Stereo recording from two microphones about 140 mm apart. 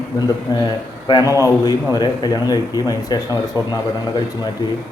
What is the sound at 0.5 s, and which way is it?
A man's voice, 30° left (ahead or behind).